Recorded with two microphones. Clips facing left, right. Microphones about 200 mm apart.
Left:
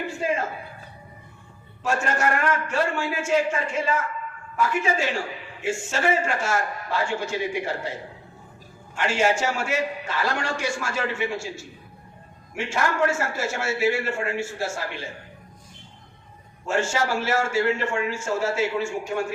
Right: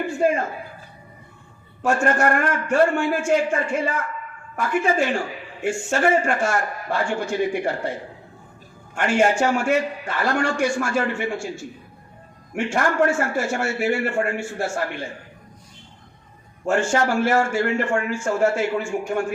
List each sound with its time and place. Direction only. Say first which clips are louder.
0.2 s a man's voice: right 6 dB; 55° right (ahead or behind)
1.8 s a man's voice: right 5 dB; 50° right (ahead or behind)
9.0 s a man's voice: right 4 dB; 55° right (ahead or behind)
12.5 s a man's voice: right 4 dB; 50° right (ahead or behind)
16.6 s a man's voice: right 4 dB; 55° right (ahead or behind)